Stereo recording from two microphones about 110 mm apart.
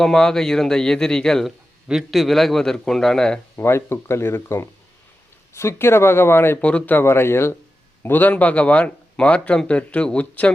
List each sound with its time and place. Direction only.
0.0 s a man's voice: 5° left (ahead or behind)
3.5 s speech: 20° left (ahead or behind)